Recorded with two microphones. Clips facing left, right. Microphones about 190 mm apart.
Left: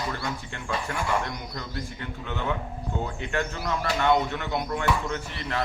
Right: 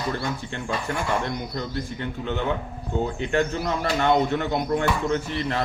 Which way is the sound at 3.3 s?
30° right (ahead or behind).